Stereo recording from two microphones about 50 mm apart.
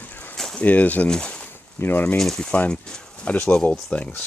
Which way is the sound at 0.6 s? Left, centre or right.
Left.